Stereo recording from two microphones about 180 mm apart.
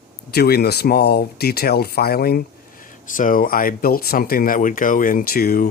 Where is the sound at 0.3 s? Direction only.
60° left (ahead or behind).